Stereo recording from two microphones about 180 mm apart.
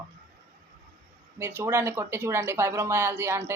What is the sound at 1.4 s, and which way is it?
Speech, 15° right (ahead or behind).